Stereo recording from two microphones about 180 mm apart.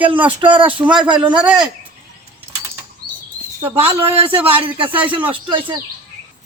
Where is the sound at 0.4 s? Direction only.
30° right (ahead or behind).